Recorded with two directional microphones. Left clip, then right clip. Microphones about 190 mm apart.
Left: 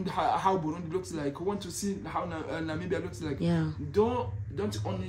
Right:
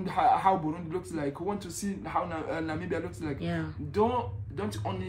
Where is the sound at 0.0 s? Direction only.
5° left (ahead or behind).